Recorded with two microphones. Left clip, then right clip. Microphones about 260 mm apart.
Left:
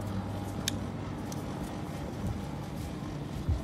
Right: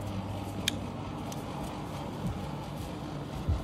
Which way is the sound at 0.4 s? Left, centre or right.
Right.